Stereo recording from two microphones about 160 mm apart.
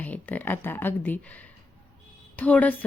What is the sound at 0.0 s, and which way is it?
A woman's voice, 10° left (ahead or behind).